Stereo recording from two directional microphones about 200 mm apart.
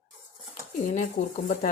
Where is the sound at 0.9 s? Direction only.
40° left (ahead or behind).